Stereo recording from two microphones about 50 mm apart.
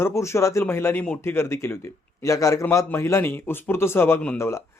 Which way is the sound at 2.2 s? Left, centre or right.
Left.